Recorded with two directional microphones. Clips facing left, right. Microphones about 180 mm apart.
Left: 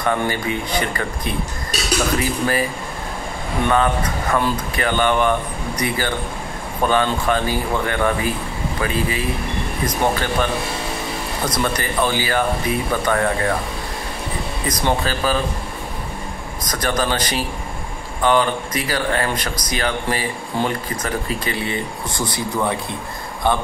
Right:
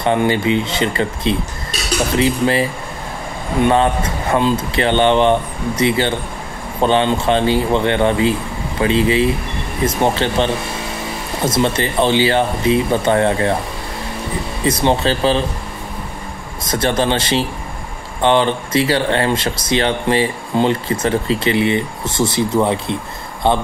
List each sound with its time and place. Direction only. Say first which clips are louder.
0.0 s speech: right 5 dB; 20° right (ahead or behind)
3.6 s speech: right 3 dB; 25° right (ahead or behind)
14.7 s speech: right 5 dB; 25° right (ahead or behind)
16.6 s speech: right 5 dB; 25° right (ahead or behind)